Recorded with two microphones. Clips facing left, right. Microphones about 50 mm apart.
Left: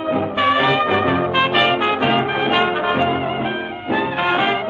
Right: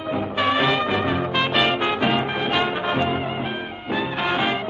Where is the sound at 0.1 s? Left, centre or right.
Centre.